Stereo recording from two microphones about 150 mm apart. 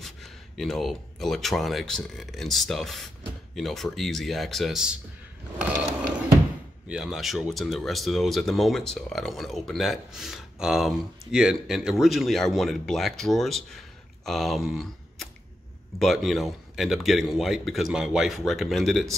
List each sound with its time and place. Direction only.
0.0 s speech: centre (ahead or behind)
6.9 s speech: 5° right (ahead or behind)